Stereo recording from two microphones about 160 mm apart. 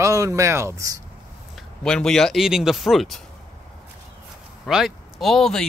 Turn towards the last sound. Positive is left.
turn(degrees=0)  # may be behind; listen again after turning